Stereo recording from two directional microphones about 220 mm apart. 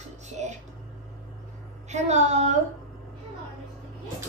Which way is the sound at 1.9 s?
30° right (ahead or behind).